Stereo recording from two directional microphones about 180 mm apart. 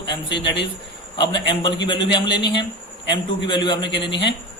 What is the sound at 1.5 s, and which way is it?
Speech, 75° left (ahead or behind).